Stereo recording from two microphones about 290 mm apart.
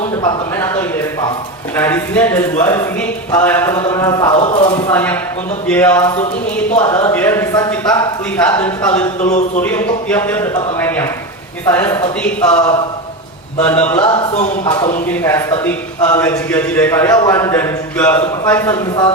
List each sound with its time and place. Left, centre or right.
0.2 s a man's voice: centre
4.9 s a man's voice: centre
9.2 s speech: left
9.6 s a man's voice: centre
14.0 s a man's voice: centre